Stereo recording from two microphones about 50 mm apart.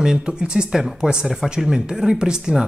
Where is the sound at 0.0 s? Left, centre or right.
Centre.